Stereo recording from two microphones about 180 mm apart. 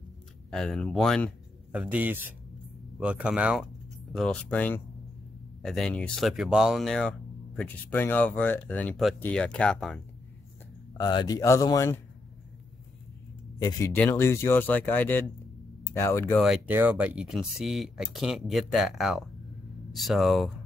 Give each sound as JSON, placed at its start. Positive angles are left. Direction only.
{"t": 0.5, "sound": "speech", "side_deg": 5}
{"t": 1.7, "sound": "a man's voice", "side_deg": -10}
{"t": 11.0, "sound": "speech", "side_deg": 25}
{"t": 13.6, "sound": "speech", "side_deg": 20}
{"t": 16.3, "sound": "speech", "side_deg": -5}